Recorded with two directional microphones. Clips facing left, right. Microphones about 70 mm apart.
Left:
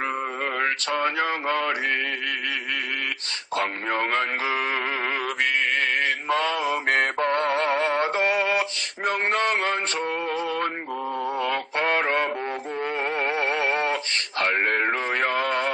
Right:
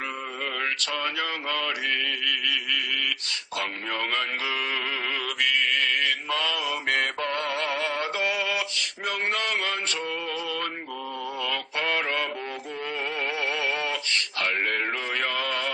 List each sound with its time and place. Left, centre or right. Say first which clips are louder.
0.6 s mantra: left 6 dB; left
3.5 s speech: left 6 dB; left
5.4 s mantra: even; left
11.3 s synthetic singing: left 3 dB; left